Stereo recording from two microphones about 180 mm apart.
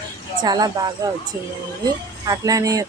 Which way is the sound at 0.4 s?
20° right (ahead or behind).